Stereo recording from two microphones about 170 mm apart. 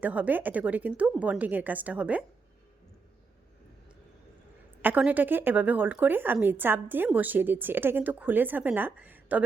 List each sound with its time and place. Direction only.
0.0 s speech: 10° right (ahead or behind)
4.8 s speech: 10° right (ahead or behind)